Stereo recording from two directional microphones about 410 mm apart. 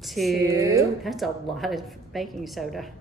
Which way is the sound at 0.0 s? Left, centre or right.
Centre.